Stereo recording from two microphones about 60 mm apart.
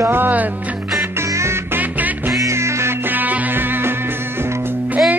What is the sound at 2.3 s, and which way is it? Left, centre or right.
Music, right.